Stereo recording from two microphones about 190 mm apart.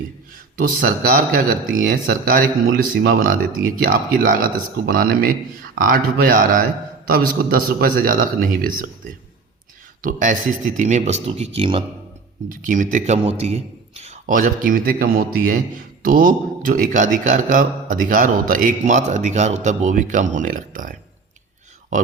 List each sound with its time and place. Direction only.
0.8 s speech: 50° right (ahead or behind)
10.0 s speech: 45° right (ahead or behind); by 11.8 s 25° right (ahead or behind)
12.5 s speech: 45° right (ahead or behind)